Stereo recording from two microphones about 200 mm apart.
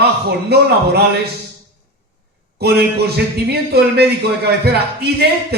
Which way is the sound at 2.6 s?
55° right (ahead or behind).